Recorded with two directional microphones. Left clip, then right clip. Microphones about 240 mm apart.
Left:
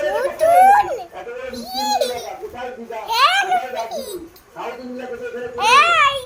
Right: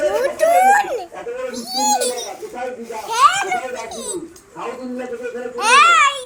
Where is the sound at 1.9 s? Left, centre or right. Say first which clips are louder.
Even; centre.